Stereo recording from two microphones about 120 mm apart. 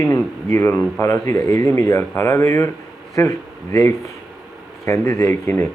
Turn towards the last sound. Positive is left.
turn(degrees=20)  # may be behind; listen again after turning